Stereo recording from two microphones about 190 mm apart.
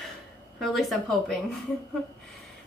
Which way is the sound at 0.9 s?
Centre (ahead or behind).